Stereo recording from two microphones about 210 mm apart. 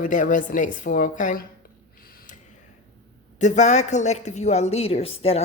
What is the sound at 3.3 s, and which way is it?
A woman's voice, 35° left (ahead or behind).